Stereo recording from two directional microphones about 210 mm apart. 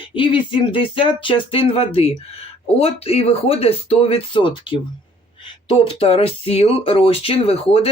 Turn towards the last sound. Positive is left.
turn(degrees=30)  # may be behind; listen again after turning